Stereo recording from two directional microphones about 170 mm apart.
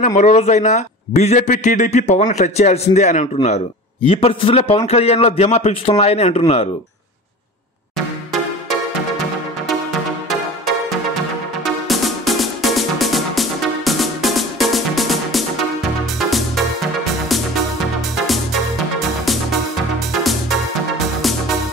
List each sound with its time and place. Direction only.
0.0 s a man's voice: 45° left (ahead or behind)
11.6 s music: centre (ahead or behind)
18.1 s music: centre (ahead or behind)